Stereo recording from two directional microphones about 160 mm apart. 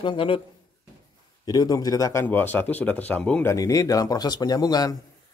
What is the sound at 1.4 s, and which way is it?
Speech, 25° left (ahead or behind).